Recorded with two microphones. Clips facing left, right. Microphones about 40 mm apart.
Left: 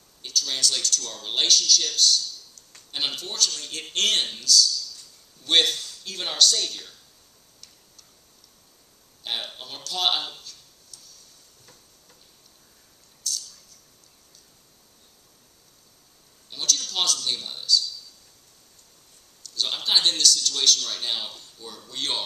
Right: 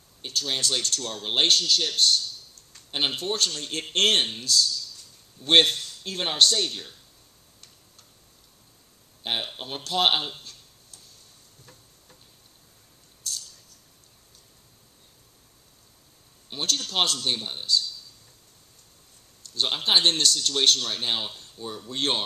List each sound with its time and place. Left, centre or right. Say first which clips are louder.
0.2 s speech: left 1 dB; right
9.2 s speech: right 2 dB; right
16.4 s speech: even; right
19.5 s speech: right 1 dB; right